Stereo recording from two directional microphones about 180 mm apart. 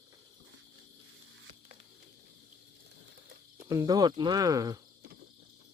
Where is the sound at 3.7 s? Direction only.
20° right (ahead or behind).